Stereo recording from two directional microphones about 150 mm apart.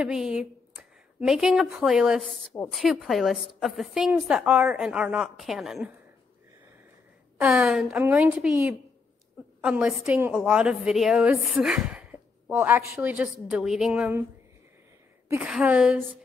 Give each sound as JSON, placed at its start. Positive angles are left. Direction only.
{"t": 0.0, "sound": "a woman's voice", "side_deg": -5}
{"t": 7.3, "sound": "a woman's voice", "side_deg": -10}
{"t": 15.2, "sound": "a woman's voice", "side_deg": -15}